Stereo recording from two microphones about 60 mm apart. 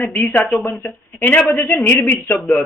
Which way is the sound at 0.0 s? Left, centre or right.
Left.